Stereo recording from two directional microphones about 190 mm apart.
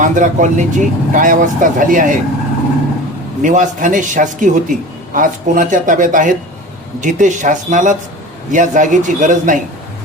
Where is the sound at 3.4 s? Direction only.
40° right (ahead or behind).